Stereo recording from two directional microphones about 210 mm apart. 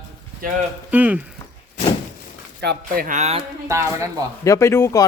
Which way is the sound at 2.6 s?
50° right (ahead or behind).